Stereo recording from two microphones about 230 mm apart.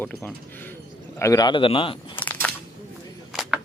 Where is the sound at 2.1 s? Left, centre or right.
Centre.